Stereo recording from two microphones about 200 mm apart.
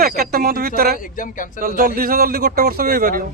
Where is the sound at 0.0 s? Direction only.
50° right (ahead or behind).